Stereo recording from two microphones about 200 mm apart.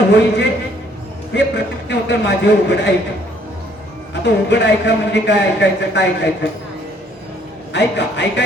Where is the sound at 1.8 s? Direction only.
60° left (ahead or behind).